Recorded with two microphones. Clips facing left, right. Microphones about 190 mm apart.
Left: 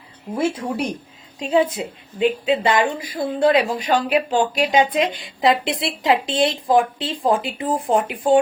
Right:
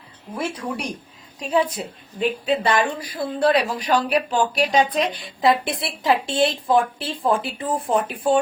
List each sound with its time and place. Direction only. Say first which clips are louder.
0.3 s speech: left 5 dB; 25° left (ahead or behind)